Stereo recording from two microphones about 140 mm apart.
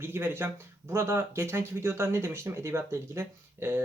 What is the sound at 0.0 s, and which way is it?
Speech, 15° right (ahead or behind).